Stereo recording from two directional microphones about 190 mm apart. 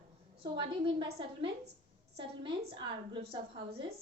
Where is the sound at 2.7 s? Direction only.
25° right (ahead or behind).